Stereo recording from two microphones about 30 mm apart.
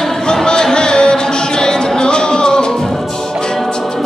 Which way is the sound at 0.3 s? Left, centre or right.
Left.